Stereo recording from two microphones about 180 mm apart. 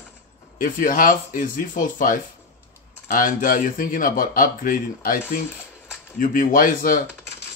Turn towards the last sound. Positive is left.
turn(degrees=50)  # may be behind; listen again after turning